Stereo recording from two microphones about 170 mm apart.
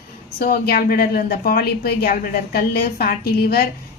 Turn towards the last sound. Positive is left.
turn(degrees=65)  # may be behind; listen again after turning